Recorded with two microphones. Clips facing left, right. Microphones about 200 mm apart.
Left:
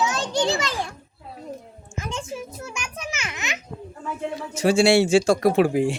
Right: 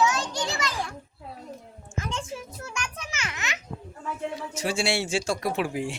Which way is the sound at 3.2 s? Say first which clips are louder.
Left 2 dB; 20° left (ahead or behind).